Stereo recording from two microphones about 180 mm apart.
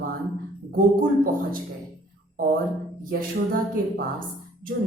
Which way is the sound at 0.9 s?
50° right (ahead or behind).